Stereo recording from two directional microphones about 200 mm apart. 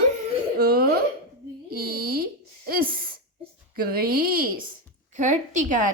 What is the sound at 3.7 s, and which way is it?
Speech, 50° right (ahead or behind).